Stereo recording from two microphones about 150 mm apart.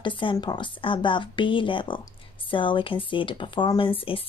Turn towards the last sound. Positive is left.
turn(degrees=35)  # may be behind; listen again after turning